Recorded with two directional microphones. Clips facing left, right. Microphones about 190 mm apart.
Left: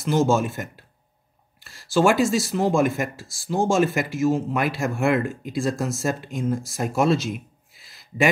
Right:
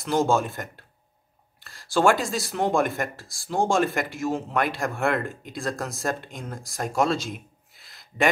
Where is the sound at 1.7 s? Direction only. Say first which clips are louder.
Even; 50° right (ahead or behind).